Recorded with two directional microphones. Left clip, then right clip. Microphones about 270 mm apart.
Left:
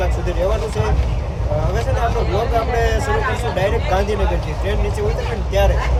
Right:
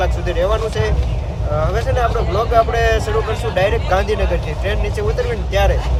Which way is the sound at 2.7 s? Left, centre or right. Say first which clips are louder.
Right 3 dB; centre.